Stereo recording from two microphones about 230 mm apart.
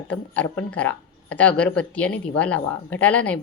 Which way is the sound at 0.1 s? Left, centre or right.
Centre.